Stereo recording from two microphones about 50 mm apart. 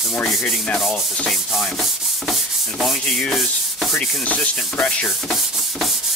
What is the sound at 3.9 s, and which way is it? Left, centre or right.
Rub, left.